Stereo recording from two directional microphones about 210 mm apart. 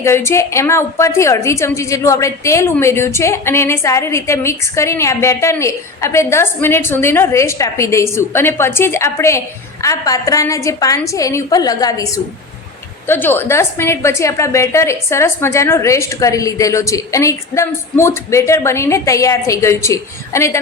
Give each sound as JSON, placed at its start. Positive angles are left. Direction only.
{"t": 0.0, "sound": "a woman's voice", "side_deg": 10}